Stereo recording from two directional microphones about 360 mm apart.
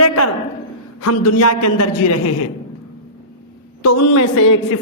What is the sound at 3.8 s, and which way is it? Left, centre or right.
Speech, left.